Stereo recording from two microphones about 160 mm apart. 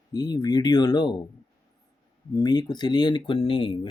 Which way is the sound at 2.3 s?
25° left (ahead or behind).